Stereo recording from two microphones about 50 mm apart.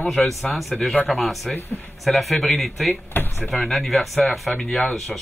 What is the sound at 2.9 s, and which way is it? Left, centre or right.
Speech, left.